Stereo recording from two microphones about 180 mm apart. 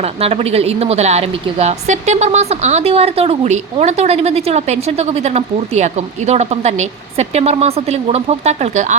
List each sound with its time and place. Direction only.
0.0 s a woman's voice: 35° right (ahead or behind)